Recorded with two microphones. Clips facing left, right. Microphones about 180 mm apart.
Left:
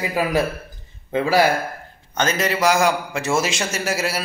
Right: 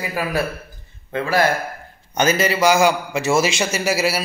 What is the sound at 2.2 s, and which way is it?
A man's voice, 5° right (ahead or behind).